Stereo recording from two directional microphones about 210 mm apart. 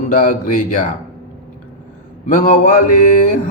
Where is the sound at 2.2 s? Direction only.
40° left (ahead or behind).